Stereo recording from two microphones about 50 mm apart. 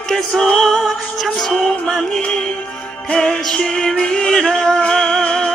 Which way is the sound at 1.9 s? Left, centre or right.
Centre.